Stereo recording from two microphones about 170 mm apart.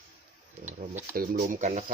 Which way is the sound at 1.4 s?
45° right (ahead or behind).